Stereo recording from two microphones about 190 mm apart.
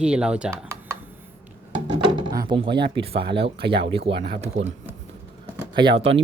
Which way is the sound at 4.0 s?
60° right (ahead or behind).